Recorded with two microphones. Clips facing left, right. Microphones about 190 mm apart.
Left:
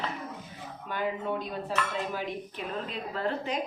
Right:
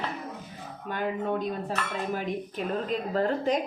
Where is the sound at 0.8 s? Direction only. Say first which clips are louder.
Right 2 dB; 45° right (ahead or behind).